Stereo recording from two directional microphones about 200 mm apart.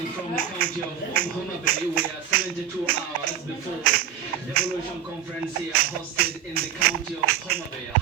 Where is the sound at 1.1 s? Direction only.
45° right (ahead or behind).